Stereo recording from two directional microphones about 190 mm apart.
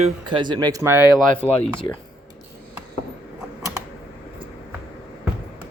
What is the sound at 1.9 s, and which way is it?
Speech, 15° left (ahead or behind).